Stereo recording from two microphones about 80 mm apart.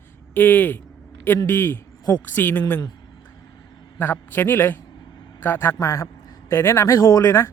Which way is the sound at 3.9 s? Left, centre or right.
Left.